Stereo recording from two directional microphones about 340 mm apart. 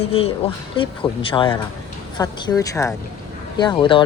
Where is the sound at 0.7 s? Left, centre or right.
Centre.